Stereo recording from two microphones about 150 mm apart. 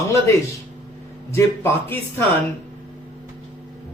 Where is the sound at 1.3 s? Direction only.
15° left (ahead or behind).